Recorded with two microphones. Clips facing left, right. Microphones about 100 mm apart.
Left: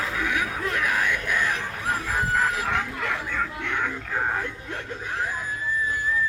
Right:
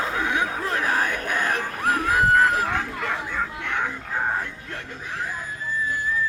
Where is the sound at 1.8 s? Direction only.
60° right (ahead or behind).